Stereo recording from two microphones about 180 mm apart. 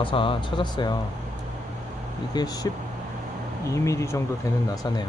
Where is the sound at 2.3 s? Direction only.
20° left (ahead or behind).